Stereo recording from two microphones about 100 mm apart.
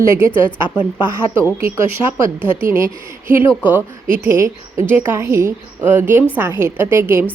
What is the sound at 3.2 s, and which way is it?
A woman's voice, 20° right (ahead or behind).